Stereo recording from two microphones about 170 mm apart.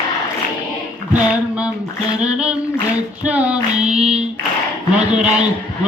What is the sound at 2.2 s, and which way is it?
Female singing, 5° right (ahead or behind).